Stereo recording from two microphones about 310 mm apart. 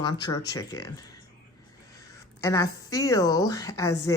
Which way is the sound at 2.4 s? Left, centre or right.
Centre.